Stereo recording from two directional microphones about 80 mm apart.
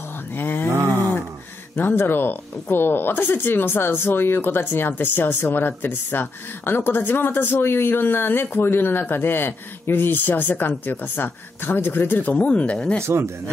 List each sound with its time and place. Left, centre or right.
0.4 s a sound: left
1.8 s speech: left
13.0 s speech: right